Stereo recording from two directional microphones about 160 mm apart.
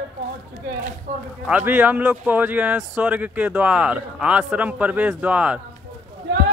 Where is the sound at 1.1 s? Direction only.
45° right (ahead or behind).